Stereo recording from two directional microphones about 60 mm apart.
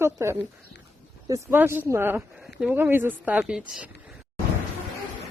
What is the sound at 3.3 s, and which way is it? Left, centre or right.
Speech, centre.